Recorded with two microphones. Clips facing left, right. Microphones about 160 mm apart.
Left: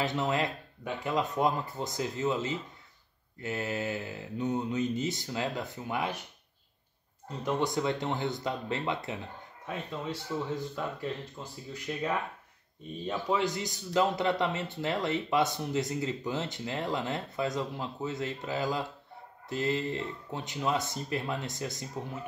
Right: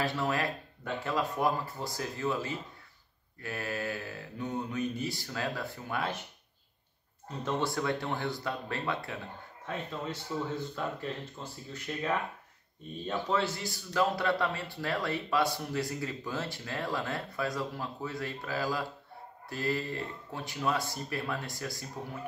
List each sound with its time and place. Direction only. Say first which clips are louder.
0.0 s a man's voice: left 1 dB; 20° left (ahead or behind)
7.4 s a man's voice: left 2 dB; 20° left (ahead or behind)
9.7 s speech: left 1 dB; 10° left (ahead or behind)
11.4 s a man's voice: left 1 dB; 5° left (ahead or behind)